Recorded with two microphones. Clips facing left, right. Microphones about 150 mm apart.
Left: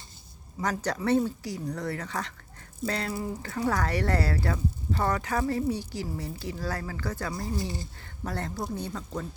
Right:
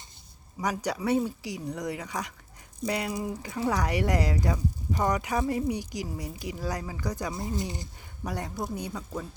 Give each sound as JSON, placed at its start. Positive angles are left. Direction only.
{"t": 0.6, "sound": "speech", "side_deg": -10}